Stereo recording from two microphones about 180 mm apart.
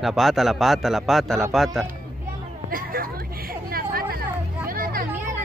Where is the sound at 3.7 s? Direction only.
55° right (ahead or behind).